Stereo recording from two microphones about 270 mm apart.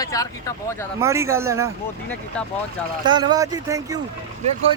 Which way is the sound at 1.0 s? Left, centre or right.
Centre.